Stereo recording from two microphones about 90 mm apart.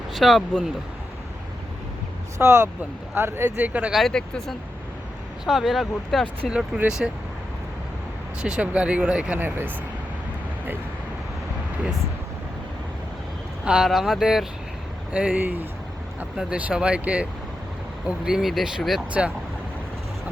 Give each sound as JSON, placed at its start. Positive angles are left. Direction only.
{"t": 0.1, "sound": "speech", "side_deg": 0}
{"t": 2.4, "sound": "speech", "side_deg": -30}
{"t": 3.6, "sound": "speech", "side_deg": -15}
{"t": 3.9, "sound": "speech", "side_deg": 5}
{"t": 6.7, "sound": "speech", "side_deg": -10}
{"t": 8.4, "sound": "speech", "side_deg": -10}
{"t": 9.4, "sound": "speech", "side_deg": -20}
{"t": 13.7, "sound": "speech", "side_deg": -5}
{"t": 18.3, "sound": "speech", "side_deg": -5}